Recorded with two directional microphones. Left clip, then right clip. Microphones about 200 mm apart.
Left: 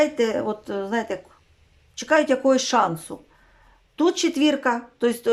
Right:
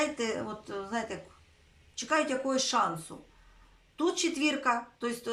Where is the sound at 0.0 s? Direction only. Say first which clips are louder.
Left 11 dB; 40° left (ahead or behind).